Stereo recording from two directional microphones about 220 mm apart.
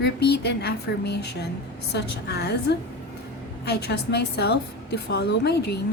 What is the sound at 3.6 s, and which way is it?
A woman's voice, 50° left (ahead or behind).